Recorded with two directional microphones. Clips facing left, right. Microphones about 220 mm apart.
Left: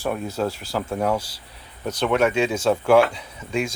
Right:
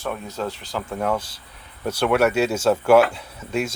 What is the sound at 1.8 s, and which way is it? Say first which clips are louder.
Speech: right 1 dB; 10° right (ahead or behind).